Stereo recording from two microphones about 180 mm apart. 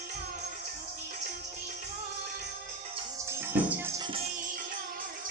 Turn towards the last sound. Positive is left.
turn(degrees=-10)  # may be behind; listen again after turning